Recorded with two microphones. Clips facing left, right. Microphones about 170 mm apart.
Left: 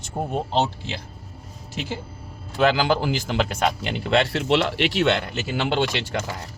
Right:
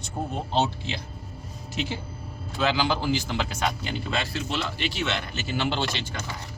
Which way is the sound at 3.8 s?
70° left (ahead or behind).